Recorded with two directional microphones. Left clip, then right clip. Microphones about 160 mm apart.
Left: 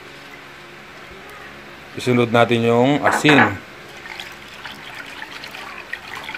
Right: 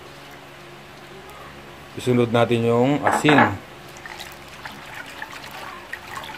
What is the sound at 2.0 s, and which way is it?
Speech, 15° left (ahead or behind).